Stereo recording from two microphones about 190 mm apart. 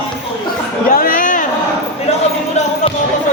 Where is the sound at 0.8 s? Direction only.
45° left (ahead or behind).